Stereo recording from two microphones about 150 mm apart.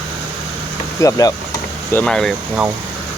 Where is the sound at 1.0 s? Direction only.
20° left (ahead or behind).